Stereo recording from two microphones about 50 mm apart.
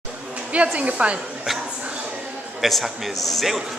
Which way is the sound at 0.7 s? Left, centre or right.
Right.